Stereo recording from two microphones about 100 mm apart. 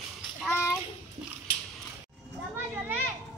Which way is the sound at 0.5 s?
25° left (ahead or behind).